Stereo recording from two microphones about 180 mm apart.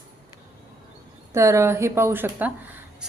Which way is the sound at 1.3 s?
15° right (ahead or behind).